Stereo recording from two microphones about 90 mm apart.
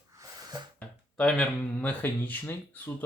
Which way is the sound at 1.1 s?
15° left (ahead or behind).